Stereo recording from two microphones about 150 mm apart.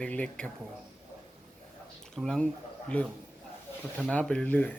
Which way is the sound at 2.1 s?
5° left (ahead or behind).